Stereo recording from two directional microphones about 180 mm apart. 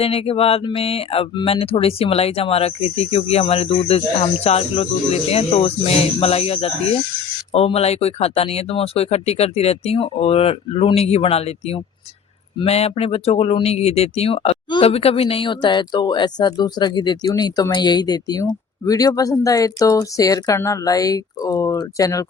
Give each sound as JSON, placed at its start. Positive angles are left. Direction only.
{"t": 0.0, "sound": "speech", "side_deg": 30}